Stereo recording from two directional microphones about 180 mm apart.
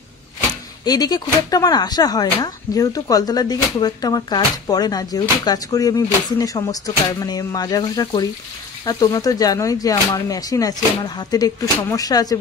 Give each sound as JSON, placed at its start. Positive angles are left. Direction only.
{"t": 0.8, "sound": "speech", "side_deg": 20}